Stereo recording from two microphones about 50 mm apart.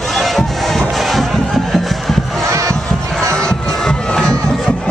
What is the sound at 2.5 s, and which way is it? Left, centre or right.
Crowd, right.